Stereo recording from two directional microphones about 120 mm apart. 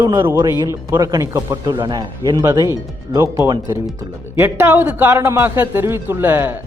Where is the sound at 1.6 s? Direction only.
35° right (ahead or behind).